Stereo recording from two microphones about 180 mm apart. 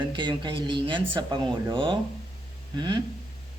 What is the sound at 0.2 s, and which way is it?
A man's voice, 25° right (ahead or behind).